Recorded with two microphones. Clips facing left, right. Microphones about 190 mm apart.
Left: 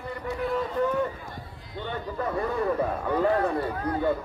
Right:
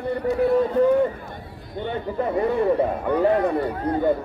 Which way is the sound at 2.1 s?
25° right (ahead or behind).